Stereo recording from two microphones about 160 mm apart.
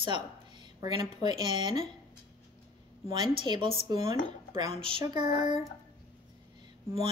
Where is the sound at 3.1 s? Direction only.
30° right (ahead or behind).